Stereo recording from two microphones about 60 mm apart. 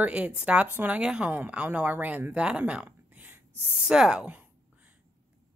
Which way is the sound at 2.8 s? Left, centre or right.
Right.